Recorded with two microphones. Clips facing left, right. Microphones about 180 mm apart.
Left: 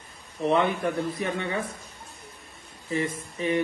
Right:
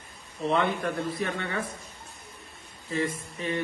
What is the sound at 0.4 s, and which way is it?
A man's voice, 15° left (ahead or behind).